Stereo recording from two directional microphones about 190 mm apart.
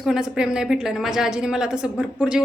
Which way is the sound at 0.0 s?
5° right (ahead or behind).